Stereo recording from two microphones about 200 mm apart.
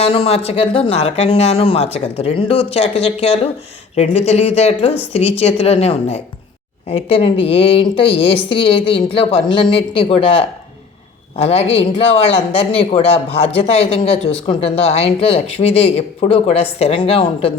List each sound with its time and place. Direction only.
0.0 s a woman's voice: 30° left (ahead or behind)